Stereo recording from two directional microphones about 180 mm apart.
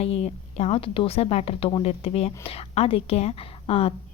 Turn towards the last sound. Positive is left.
turn(degrees=35)  # may be behind; listen again after turning